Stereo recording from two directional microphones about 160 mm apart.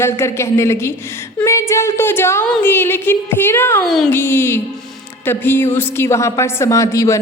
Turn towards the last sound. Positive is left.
turn(degrees=20)  # may be behind; listen again after turning